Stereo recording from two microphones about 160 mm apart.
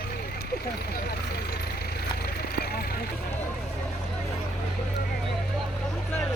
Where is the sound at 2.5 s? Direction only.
75° left (ahead or behind).